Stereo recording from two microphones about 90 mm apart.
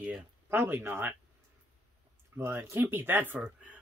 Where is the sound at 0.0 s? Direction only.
20° right (ahead or behind).